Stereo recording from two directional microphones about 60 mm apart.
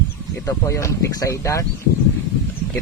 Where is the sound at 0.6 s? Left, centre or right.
Left.